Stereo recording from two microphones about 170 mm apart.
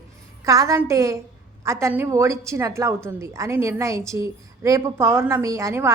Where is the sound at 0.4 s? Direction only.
20° right (ahead or behind).